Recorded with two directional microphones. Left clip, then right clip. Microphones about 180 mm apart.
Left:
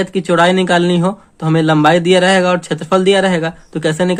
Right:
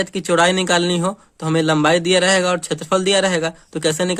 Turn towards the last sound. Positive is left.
turn(degrees=-35)  # may be behind; listen again after turning